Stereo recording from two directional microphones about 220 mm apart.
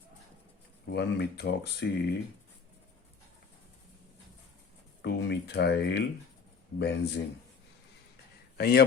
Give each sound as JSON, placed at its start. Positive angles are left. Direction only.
{"t": 0.9, "sound": "speech", "side_deg": 45}
{"t": 5.0, "sound": "speech", "side_deg": 50}
{"t": 8.5, "sound": "a man's voice", "side_deg": 45}